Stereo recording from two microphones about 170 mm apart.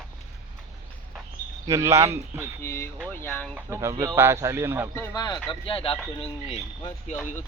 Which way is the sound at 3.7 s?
15° right (ahead or behind).